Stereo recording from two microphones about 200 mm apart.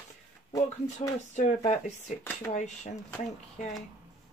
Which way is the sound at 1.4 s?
35° left (ahead or behind).